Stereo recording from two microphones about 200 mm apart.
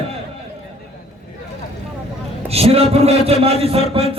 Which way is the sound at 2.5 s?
30° right (ahead or behind).